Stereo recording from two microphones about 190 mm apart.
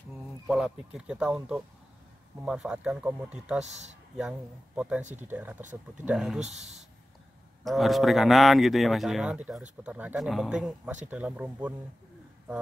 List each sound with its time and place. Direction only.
0.5 s a man's voice: 5° right (ahead or behind)
6.4 s speech: 35° right (ahead or behind)
7.6 s a man's voice: centre (ahead or behind)